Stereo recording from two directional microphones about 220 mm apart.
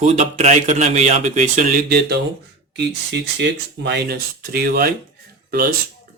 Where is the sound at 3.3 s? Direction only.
50° right (ahead or behind).